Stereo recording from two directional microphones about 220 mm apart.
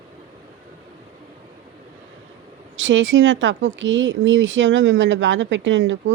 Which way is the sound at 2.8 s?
55° right (ahead or behind).